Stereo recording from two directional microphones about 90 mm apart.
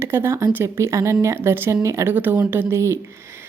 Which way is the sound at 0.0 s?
30° right (ahead or behind).